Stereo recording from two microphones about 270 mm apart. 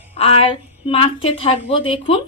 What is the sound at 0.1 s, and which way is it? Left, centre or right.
A woman's voice, left.